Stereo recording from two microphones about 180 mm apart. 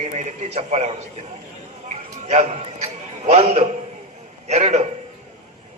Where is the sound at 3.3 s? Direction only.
35° right (ahead or behind).